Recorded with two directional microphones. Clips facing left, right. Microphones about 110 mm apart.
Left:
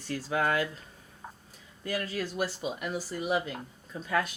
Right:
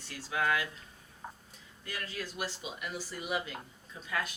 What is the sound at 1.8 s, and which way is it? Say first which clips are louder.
A woman's voice: left 8 dB; 45° left (ahead or behind).